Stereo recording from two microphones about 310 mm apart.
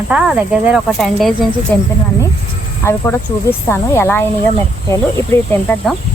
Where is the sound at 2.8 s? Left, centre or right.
Centre.